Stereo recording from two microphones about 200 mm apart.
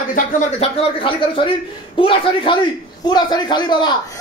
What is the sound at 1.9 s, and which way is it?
A man's voice, 25° left (ahead or behind).